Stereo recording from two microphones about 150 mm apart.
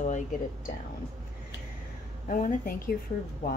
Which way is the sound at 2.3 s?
65° left (ahead or behind).